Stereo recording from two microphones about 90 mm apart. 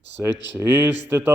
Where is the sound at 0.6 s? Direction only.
20° right (ahead or behind).